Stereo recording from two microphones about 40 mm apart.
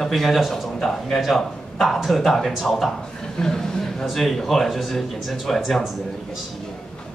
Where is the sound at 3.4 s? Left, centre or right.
Centre.